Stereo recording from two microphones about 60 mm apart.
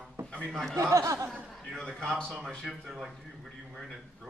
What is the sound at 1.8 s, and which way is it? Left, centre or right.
Speech, centre.